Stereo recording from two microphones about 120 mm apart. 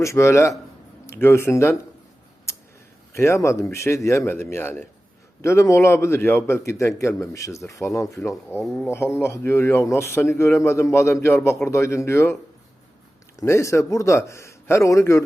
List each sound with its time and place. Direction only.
0.0 s speech: 25° left (ahead or behind)
3.1 s speech: 20° left (ahead or behind)
8.6 s speech: centre (ahead or behind)
8.9 s speech: 20° left (ahead or behind)